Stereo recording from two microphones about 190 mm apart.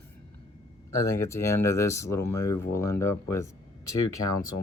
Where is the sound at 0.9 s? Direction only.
15° left (ahead or behind).